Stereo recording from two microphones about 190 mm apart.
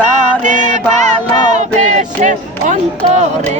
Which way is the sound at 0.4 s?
40° right (ahead or behind).